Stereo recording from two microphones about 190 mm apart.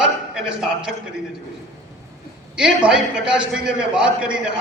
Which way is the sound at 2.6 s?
5° right (ahead or behind).